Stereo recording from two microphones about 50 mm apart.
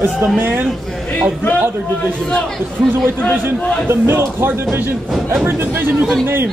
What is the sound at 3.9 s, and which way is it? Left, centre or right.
Speech, right.